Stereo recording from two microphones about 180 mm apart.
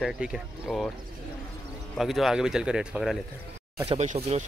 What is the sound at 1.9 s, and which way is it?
Speech, centre (ahead or behind).